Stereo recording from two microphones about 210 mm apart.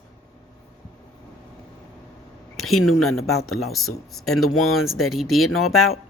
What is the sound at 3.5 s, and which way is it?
Speech, centre (ahead or behind).